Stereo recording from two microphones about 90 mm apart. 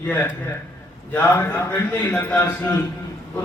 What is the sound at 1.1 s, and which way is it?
A man's voice, 20° left (ahead or behind).